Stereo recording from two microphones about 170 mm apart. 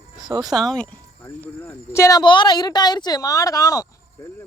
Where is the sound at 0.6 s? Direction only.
5° left (ahead or behind).